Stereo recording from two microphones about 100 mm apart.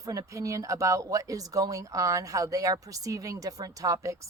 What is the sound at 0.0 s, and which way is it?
Speech, 35° right (ahead or behind).